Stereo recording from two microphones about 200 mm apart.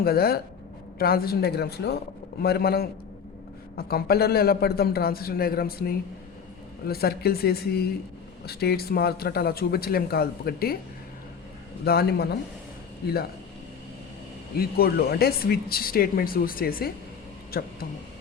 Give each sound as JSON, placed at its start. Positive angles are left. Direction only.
{"t": 0.0, "sound": "speech", "side_deg": 50}
{"t": 11.9, "sound": "speech", "side_deg": 50}
{"t": 14.5, "sound": "speech", "side_deg": 50}